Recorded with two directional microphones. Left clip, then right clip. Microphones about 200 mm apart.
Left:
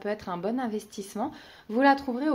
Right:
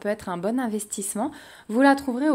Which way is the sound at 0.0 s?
35° right (ahead or behind).